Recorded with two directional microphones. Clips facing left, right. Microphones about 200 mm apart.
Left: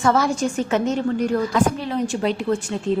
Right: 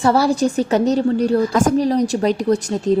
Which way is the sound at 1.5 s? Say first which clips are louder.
Right 5 dB; 45° right (ahead or behind).